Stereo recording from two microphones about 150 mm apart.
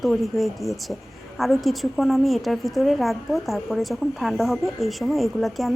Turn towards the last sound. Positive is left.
turn(degrees=0)  # may be behind; listen again after turning